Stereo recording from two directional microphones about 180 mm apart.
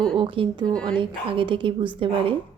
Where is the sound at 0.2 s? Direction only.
30° right (ahead or behind).